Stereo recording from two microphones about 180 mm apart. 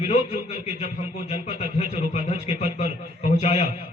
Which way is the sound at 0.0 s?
35° left (ahead or behind).